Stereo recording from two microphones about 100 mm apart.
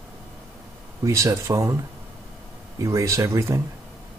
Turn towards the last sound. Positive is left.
turn(degrees=-30)  # may be behind; listen again after turning